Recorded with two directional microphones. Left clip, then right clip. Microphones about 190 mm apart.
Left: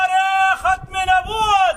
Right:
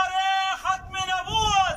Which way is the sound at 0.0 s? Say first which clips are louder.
Left 8 dB; 65° left (ahead or behind).